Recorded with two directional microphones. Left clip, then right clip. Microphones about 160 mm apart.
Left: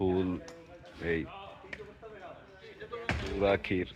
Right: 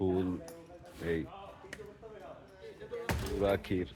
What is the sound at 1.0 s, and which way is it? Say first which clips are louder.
Speech: left 3 dB; 5° left (ahead or behind).